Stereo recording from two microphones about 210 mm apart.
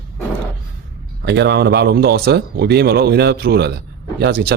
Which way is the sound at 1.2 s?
55° right (ahead or behind).